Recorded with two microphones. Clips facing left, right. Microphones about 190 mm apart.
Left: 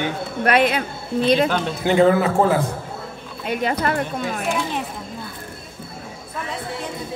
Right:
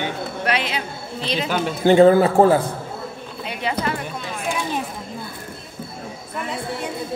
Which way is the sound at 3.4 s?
50° left (ahead or behind).